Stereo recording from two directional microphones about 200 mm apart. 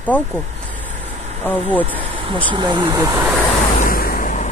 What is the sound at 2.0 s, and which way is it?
Speech, 25° right (ahead or behind).